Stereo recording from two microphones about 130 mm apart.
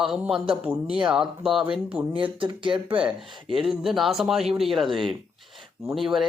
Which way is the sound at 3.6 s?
Centre (ahead or behind).